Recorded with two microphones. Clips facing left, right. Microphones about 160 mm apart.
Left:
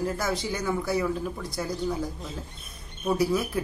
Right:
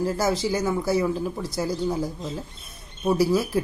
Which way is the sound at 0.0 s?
30° right (ahead or behind).